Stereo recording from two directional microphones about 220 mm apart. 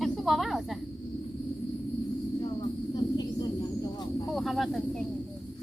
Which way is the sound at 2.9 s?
15° left (ahead or behind).